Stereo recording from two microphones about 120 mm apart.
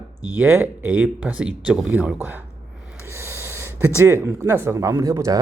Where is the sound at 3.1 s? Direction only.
20° right (ahead or behind).